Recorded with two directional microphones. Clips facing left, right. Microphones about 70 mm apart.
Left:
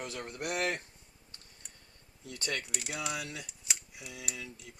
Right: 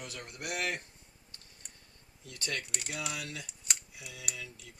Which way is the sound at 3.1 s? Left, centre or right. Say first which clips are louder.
Left 2 dB; left.